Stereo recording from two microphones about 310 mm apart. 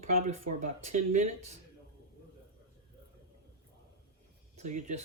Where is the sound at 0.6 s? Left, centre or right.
Right.